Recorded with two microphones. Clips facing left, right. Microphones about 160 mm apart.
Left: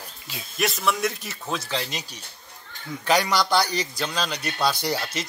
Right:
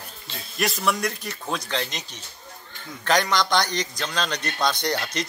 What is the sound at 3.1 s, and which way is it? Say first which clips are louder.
A man's voice: even; 10° left (ahead or behind).